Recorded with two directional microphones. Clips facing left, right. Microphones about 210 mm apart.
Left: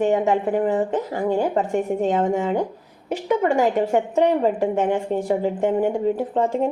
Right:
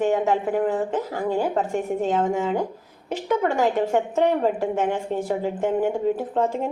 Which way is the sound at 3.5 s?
15° left (ahead or behind).